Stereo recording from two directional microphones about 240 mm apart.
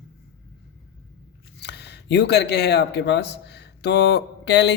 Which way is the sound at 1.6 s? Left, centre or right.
Left.